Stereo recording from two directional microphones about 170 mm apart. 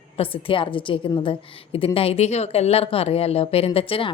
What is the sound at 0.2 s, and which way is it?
A woman's voice, 30° left (ahead or behind).